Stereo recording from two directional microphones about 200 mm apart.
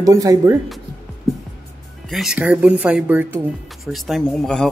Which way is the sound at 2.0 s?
Centre (ahead or behind).